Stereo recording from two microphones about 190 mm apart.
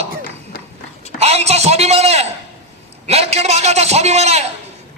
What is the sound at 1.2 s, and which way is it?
A man's voice, 35° right (ahead or behind).